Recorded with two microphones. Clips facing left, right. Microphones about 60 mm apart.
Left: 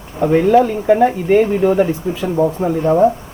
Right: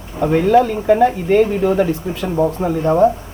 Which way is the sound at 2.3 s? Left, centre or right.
Centre.